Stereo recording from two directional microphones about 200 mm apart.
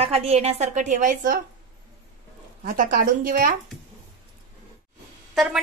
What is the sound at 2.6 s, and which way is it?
Speech, 45° right (ahead or behind).